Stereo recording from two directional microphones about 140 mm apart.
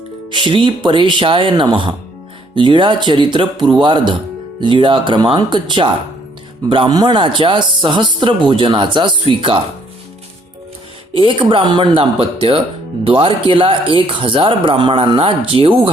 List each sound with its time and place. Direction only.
0.3 s speech: 35° right (ahead or behind)
11.1 s speech: 40° right (ahead or behind)